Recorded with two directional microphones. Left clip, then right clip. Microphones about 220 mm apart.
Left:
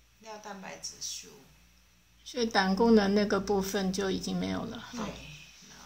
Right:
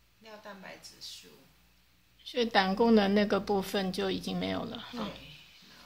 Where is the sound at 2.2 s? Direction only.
10° right (ahead or behind).